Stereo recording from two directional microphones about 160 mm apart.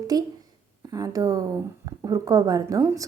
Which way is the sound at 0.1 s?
25° right (ahead or behind).